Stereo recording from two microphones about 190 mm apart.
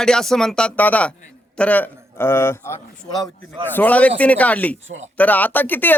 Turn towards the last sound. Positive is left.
turn(degrees=10)  # may be behind; listen again after turning